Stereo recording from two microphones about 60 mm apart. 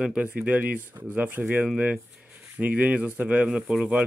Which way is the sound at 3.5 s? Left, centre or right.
Centre.